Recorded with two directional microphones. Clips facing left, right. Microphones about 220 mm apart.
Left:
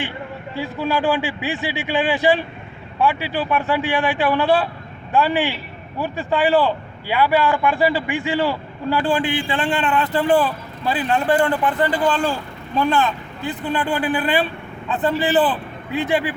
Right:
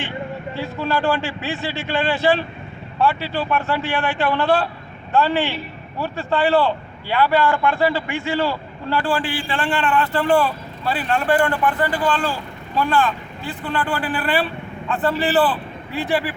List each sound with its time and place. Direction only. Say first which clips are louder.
0.5 s a man's voice: left 2 dB; 15° left (ahead or behind)